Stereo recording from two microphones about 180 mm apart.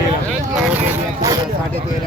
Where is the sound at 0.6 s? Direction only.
10° right (ahead or behind).